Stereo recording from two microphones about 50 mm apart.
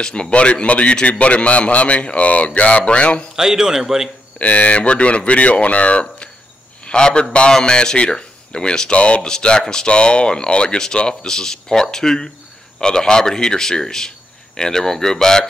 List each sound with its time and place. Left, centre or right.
0.0 s speech: centre
3.3 s speech: centre
4.4 s speech: left; by 15.4 s centre